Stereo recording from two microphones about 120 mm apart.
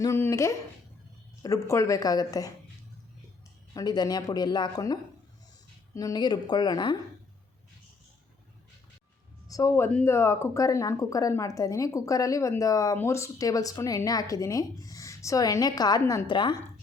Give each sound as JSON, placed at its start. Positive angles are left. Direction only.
{"t": 0.0, "sound": "speech", "side_deg": 25}
{"t": 3.8, "sound": "speech", "side_deg": 35}
{"t": 9.5, "sound": "speech", "side_deg": 25}
{"t": 16.3, "sound": "a woman's voice", "side_deg": 40}